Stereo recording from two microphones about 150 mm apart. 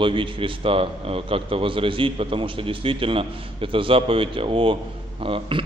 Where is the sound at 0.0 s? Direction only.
35° right (ahead or behind).